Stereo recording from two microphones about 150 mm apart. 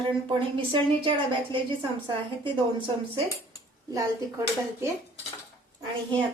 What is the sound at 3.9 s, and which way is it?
Speech, 20° right (ahead or behind).